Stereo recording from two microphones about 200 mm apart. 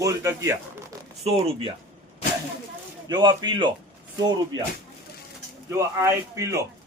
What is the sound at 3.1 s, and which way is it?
Speech, 20° right (ahead or behind).